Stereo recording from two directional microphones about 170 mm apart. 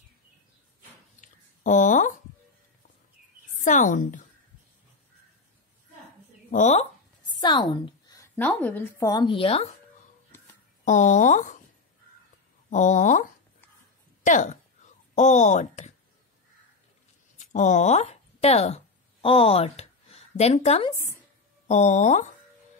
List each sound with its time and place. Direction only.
1.2 s a sound: 50° left (ahead or behind)
3.6 s speech: 50° left (ahead or behind)
6.5 s speech: 45° left (ahead or behind)
7.2 s a sound: 25° left (ahead or behind)
8.4 s speech: 10° left (ahead or behind)
9.0 s speech: 25° left (ahead or behind)
10.9 s speech: 50° left (ahead or behind)
12.6 s speech: 45° left (ahead or behind)
14.2 s speech: 45° left (ahead or behind)
17.4 s speech: 45° left (ahead or behind)